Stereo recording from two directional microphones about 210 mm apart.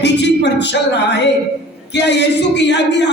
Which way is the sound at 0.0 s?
55° left (ahead or behind).